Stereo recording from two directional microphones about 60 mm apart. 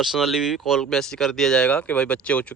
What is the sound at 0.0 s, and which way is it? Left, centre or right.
Speech, centre.